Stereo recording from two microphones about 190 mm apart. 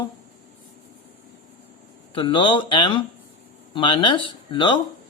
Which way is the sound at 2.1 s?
25° left (ahead or behind).